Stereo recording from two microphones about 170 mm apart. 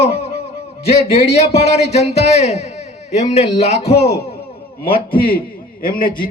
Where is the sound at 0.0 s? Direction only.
35° left (ahead or behind).